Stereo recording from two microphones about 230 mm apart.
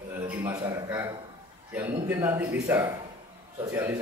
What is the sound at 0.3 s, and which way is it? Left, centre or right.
A man's voice, centre.